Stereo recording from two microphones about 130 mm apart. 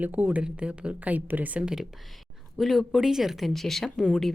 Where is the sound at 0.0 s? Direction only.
10° right (ahead or behind).